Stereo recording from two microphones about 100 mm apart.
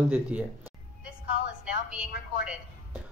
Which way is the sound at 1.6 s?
10° right (ahead or behind).